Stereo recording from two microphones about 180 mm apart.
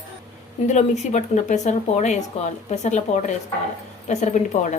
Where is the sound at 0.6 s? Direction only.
40° left (ahead or behind).